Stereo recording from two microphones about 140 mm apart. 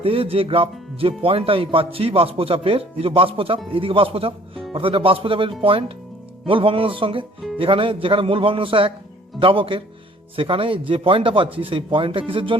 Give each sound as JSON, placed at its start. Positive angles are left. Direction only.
{"t": 0.0, "sound": "speech", "side_deg": -40}